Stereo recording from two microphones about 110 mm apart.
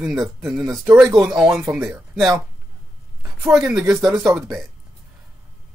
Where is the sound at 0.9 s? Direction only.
5° right (ahead or behind).